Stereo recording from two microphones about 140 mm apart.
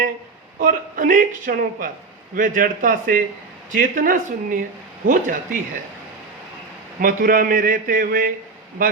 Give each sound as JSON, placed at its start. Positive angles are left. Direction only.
{"t": 0.6, "sound": "speech", "side_deg": -80}
{"t": 7.0, "sound": "speech", "side_deg": -85}
{"t": 8.8, "sound": "speech", "side_deg": -75}